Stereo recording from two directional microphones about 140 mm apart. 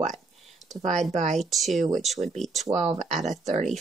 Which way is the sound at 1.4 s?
Centre (ahead or behind).